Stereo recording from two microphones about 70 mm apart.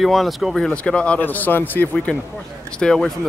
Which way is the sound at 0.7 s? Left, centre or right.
Centre.